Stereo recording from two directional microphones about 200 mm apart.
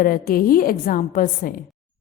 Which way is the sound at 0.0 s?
45° left (ahead or behind).